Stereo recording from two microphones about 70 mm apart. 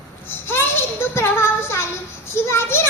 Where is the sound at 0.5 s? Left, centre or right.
Left.